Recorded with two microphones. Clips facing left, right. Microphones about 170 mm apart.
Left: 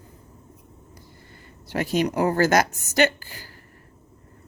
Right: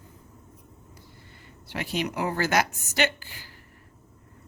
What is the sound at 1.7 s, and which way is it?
Speech, 45° left (ahead or behind).